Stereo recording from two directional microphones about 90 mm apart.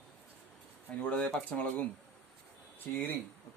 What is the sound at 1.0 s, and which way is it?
Speech, 15° left (ahead or behind).